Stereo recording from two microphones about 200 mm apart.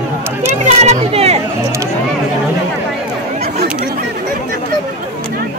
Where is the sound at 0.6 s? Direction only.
30° right (ahead or behind).